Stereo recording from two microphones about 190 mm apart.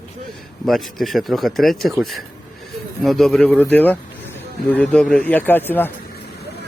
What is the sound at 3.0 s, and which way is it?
A man's voice, centre (ahead or behind).